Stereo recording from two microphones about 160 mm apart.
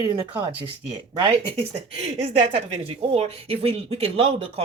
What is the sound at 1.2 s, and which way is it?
Speech, 35° right (ahead or behind).